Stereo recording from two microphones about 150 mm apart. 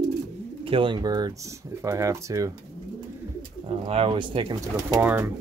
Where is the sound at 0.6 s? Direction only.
35° right (ahead or behind).